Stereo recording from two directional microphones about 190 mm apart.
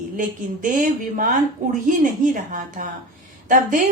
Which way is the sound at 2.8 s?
45° right (ahead or behind).